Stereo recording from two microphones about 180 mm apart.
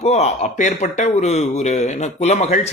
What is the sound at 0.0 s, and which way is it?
A man's voice, 35° left (ahead or behind).